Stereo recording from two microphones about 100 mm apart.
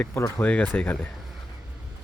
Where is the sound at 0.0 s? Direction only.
25° left (ahead or behind).